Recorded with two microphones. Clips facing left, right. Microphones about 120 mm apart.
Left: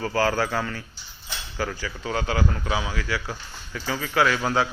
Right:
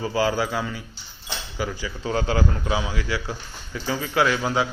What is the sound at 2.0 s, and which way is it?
A man's voice, 30° right (ahead or behind).